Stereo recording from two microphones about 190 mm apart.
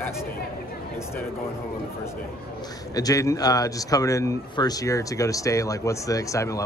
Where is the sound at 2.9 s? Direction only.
20° left (ahead or behind).